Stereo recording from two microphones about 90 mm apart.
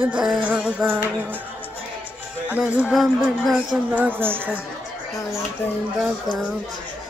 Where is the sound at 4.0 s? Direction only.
20° right (ahead or behind).